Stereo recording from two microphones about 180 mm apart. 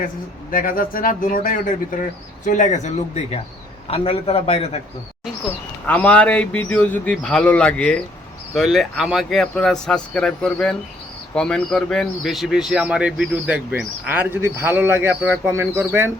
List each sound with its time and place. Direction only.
0.5 s a man's voice: 50° left (ahead or behind); by 4.8 s 35° left (ahead or behind)
5.8 s speech: 10° left (ahead or behind); by 16.1 s 10° right (ahead or behind)